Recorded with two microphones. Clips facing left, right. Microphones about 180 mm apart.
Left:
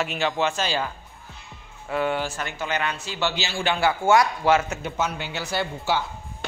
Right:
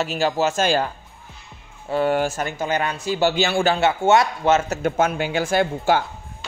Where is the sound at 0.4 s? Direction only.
45° right (ahead or behind).